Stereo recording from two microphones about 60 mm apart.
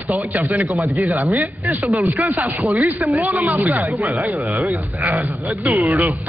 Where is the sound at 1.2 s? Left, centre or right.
Right.